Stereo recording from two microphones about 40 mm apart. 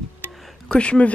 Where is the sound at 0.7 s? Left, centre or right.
Left.